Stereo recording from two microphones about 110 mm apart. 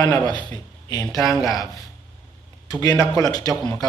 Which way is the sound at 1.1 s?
30° left (ahead or behind).